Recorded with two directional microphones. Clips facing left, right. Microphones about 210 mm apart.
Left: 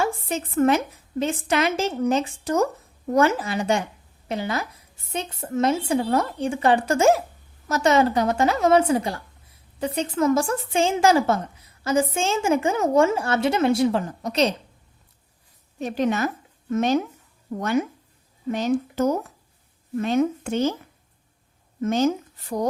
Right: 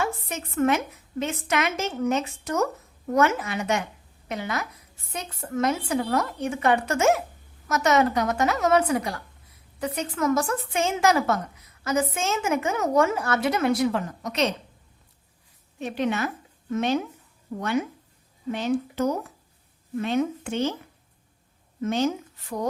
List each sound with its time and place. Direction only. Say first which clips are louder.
0.0 s a sound: left 4 dB; 30° left (ahead or behind)
1.2 s a woman's voice: left 4 dB; 30° left (ahead or behind)
15.8 s a woman's voice: left 3 dB; 40° left (ahead or behind)
18.5 s a woman's voice: left 3 dB; 45° left (ahead or behind)
21.8 s a woman's voice: left 3 dB; 45° left (ahead or behind)